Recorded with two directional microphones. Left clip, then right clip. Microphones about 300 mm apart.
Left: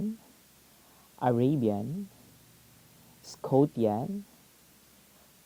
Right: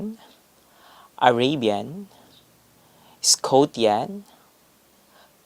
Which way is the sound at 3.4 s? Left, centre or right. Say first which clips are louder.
Right 7 dB; right.